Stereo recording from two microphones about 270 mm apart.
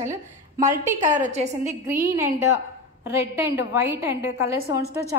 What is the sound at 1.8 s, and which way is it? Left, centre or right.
A woman's voice, centre.